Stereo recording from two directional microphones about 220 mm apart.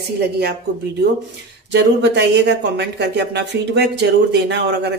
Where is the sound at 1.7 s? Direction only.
50° right (ahead or behind).